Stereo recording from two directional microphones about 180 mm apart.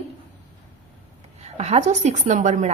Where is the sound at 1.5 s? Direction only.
35° right (ahead or behind).